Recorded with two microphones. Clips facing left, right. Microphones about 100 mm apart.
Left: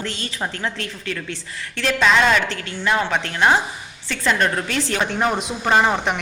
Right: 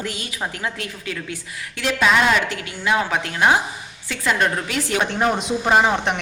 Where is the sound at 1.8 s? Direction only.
10° right (ahead or behind).